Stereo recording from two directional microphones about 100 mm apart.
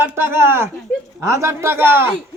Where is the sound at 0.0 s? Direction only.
25° right (ahead or behind).